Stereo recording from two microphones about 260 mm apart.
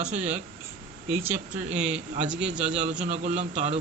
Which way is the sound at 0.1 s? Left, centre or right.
Right.